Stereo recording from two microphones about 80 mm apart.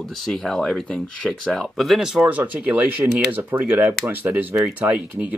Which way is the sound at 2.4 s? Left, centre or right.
Centre.